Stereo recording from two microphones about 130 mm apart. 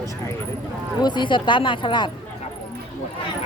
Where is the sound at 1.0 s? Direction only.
35° left (ahead or behind).